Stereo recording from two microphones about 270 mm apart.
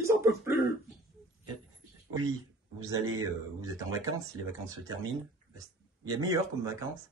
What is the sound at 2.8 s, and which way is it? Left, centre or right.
Speech, centre.